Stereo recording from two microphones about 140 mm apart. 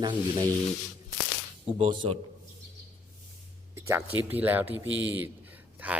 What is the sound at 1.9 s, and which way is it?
Speech, 35° right (ahead or behind).